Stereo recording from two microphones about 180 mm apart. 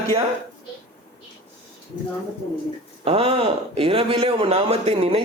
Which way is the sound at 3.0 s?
30° right (ahead or behind).